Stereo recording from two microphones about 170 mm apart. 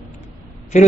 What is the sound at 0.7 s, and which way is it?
Speech, 45° left (ahead or behind).